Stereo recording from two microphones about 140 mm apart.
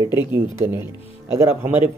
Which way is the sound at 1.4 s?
15° right (ahead or behind).